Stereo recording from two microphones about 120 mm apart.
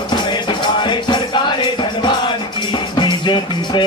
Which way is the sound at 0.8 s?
40° left (ahead or behind).